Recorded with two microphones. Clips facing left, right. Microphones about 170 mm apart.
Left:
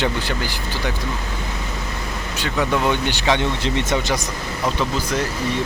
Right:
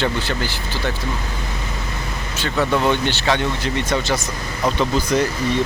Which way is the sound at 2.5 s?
10° left (ahead or behind).